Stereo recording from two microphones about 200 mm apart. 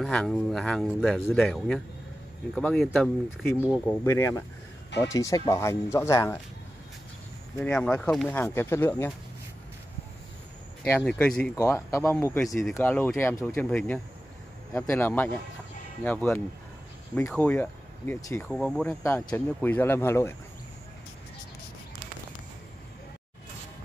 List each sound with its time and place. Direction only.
0.0 s speech: 5° left (ahead or behind)
4.0 s speech: 15° left (ahead or behind)
7.5 s speech: 5° left (ahead or behind)
10.8 s speech: 5° left (ahead or behind)